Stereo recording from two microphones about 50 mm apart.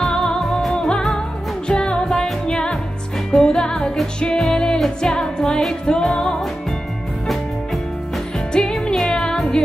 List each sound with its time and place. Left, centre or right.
0.0 s music: centre
8.5 s music: centre